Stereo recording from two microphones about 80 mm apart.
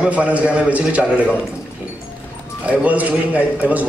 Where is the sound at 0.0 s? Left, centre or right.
Centre.